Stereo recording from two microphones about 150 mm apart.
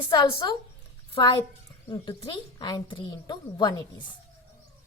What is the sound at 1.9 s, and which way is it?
A woman's voice, 30° left (ahead or behind).